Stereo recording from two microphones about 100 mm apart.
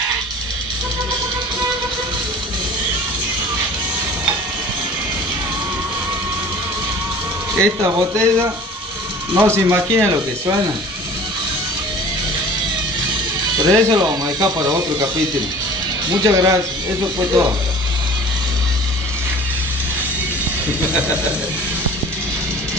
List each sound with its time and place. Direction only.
7.6 s speech: 30° right (ahead or behind)
13.6 s speech: 40° right (ahead or behind)
16.2 s speech: 30° right (ahead or behind)